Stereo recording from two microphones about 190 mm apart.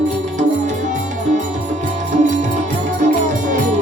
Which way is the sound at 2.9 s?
40° right (ahead or behind).